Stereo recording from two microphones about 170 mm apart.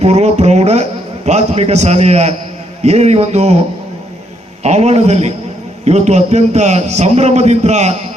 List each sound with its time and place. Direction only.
0.0 s a man's voice: 40° right (ahead or behind)
4.6 s a man's voice: 40° right (ahead or behind)